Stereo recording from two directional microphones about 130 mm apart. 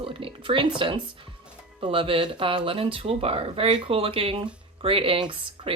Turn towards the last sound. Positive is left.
turn(degrees=-40)  # may be behind; listen again after turning